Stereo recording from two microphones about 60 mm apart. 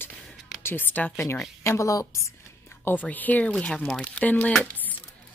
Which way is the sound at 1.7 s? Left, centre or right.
Left.